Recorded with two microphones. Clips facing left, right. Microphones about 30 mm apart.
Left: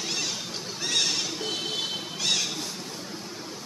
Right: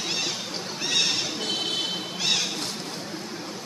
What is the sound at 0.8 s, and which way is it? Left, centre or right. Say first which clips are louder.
Neigh: right 2 dB; centre.